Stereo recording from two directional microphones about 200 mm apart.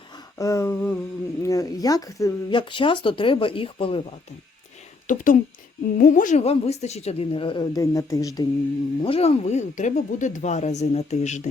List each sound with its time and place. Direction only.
0.3 s speech: 15° left (ahead or behind)
5.0 s a woman's voice: 40° left (ahead or behind); by 8.4 s 15° left (ahead or behind)
9.0 s speech: 30° left (ahead or behind)